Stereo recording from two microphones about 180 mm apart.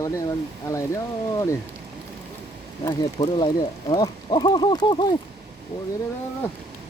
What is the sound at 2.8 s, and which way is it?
Speech, 20° left (ahead or behind).